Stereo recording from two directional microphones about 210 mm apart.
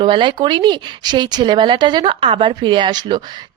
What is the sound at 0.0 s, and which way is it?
A woman's voice, 25° right (ahead or behind).